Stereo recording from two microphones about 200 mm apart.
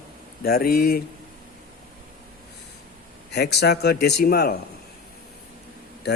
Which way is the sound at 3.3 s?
55° left (ahead or behind).